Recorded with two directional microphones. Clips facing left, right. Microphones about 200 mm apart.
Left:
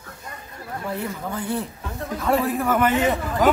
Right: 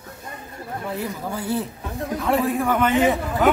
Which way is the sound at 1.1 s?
10° right (ahead or behind).